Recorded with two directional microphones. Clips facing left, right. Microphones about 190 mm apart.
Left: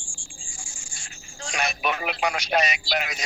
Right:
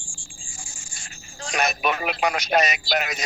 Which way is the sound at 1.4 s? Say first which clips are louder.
Right 3 dB; 45° right (ahead or behind).